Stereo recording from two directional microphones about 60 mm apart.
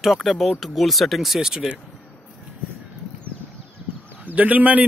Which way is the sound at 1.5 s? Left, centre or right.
Centre.